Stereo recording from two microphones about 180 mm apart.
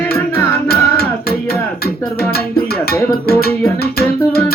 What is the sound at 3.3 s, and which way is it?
Music, 60° left (ahead or behind).